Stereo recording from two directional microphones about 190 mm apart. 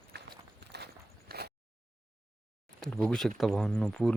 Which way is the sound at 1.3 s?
55° right (ahead or behind).